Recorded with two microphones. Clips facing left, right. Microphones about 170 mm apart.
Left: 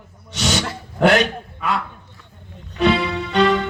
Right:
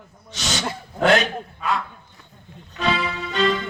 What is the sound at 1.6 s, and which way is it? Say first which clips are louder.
Speech: left 2 dB; 75° left (ahead or behind).